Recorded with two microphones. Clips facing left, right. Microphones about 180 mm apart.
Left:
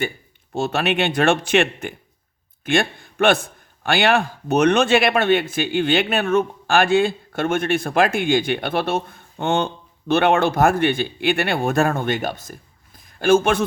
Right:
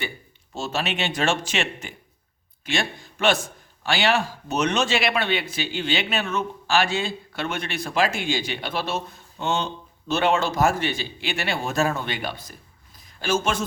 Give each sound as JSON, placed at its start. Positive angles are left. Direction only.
{"t": 0.5, "sound": "a man's voice", "side_deg": 60}